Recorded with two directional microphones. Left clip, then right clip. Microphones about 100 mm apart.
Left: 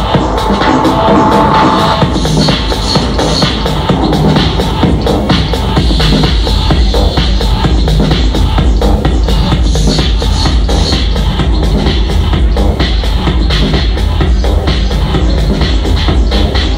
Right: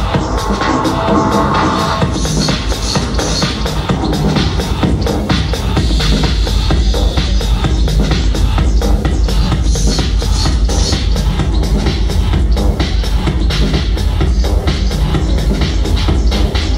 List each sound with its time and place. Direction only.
0.1 s music: 20° left (ahead or behind)